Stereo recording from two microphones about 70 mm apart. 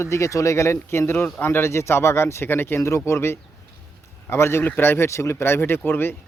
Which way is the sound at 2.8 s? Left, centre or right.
Left.